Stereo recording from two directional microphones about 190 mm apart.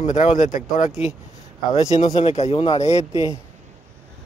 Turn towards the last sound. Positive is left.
turn(degrees=35)  # may be behind; listen again after turning